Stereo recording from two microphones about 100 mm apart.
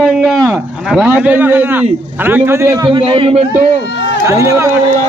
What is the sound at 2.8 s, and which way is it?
Speech, 55° right (ahead or behind).